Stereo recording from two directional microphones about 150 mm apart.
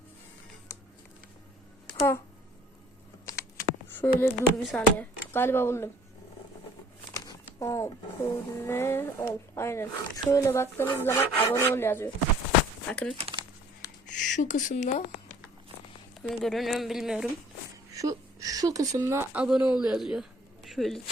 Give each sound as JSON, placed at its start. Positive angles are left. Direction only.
{"t": 2.0, "sound": "speech", "side_deg": 15}
{"t": 3.2, "sound": "speech", "side_deg": 20}
{"t": 7.4, "sound": "a sound", "side_deg": 20}
{"t": 8.6, "sound": "speech", "side_deg": 15}
{"t": 13.8, "sound": "a sound", "side_deg": 20}
{"t": 14.2, "sound": "speech", "side_deg": 55}
{"t": 16.2, "sound": "speech", "side_deg": 0}
{"t": 18.0, "sound": "speech", "side_deg": -25}